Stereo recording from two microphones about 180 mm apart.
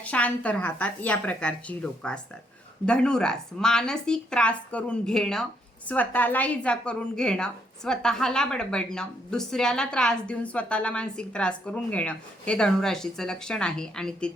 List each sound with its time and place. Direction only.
0.0 s a woman's voice: 10° left (ahead or behind)